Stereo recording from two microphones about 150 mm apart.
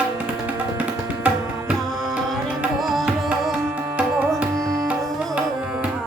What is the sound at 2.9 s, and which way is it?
Music, centre (ahead or behind).